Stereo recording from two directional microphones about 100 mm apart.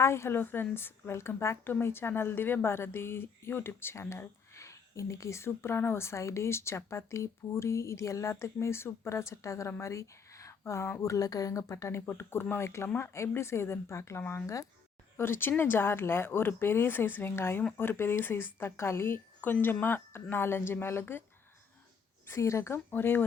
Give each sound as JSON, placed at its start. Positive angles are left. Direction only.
{"t": 0.0, "sound": "a woman's voice", "side_deg": 25}
{"t": 11.1, "sound": "a woman's voice", "side_deg": 35}
{"t": 15.2, "sound": "a woman's voice", "side_deg": 20}
{"t": 22.3, "sound": "a woman's voice", "side_deg": 30}